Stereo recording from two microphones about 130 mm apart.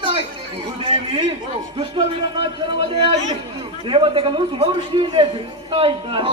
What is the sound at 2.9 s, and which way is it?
A man's voice, 45° right (ahead or behind).